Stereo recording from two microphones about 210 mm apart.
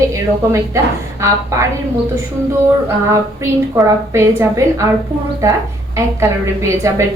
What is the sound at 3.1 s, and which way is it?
A woman's voice, 15° right (ahead or behind).